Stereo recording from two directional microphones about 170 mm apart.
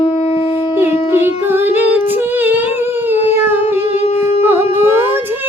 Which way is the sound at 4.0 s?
35° left (ahead or behind).